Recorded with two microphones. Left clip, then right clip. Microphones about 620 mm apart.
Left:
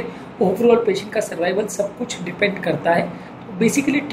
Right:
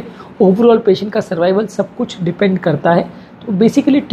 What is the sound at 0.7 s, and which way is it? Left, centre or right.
A woman's voice, right.